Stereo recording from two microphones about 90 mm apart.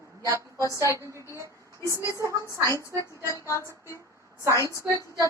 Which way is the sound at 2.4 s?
35° left (ahead or behind).